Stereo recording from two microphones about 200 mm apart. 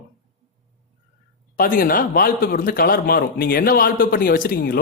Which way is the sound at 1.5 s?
45° left (ahead or behind).